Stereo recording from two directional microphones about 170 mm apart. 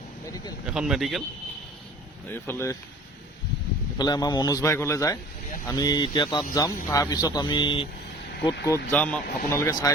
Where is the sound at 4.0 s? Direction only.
25° left (ahead or behind).